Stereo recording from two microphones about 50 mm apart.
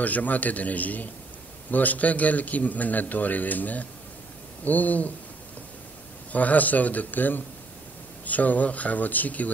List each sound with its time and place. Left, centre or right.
0.0 s a man's voice: left
6.3 s a man's voice: left